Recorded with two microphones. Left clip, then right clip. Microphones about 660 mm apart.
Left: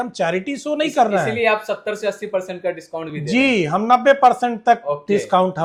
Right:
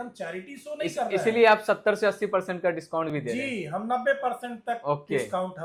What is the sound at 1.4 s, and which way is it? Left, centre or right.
Speech, right.